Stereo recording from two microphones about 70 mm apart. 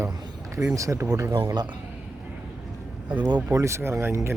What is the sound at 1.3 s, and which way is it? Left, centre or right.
Speech, right.